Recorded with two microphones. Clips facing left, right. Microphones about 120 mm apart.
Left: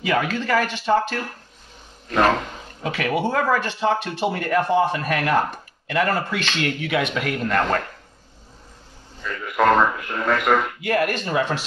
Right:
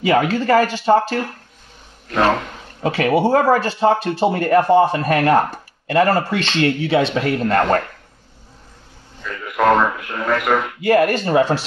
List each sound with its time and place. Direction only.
0.1 s speech: 35° right (ahead or behind)
2.8 s speech: 35° right (ahead or behind)
9.2 s speech: centre (ahead or behind)
10.8 s speech: 35° right (ahead or behind)